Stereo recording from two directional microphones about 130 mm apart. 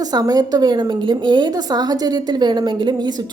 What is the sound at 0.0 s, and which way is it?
A woman's voice, 30° right (ahead or behind).